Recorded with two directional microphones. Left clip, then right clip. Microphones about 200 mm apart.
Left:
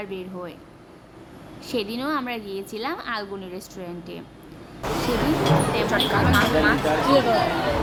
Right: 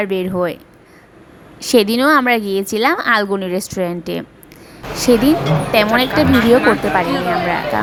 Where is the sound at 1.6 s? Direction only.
50° right (ahead or behind).